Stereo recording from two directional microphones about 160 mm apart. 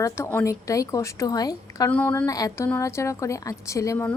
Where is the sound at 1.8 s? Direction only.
10° left (ahead or behind).